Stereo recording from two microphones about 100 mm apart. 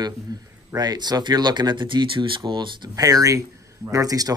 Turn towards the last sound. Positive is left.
turn(degrees=-40)  # may be behind; listen again after turning